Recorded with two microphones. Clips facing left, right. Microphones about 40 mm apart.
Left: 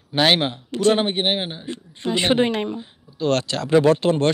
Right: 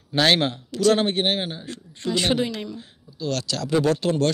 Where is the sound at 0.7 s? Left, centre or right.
Left.